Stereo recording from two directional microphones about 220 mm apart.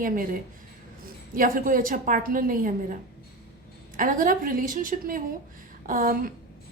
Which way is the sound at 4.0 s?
40° right (ahead or behind).